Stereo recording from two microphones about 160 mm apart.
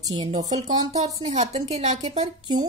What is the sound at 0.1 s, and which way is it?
Speech, 40° right (ahead or behind).